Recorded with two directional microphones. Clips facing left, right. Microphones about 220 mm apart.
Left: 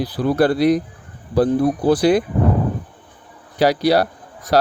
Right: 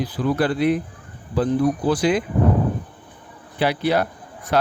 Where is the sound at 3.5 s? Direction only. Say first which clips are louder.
Left 5 dB; 40° left (ahead or behind).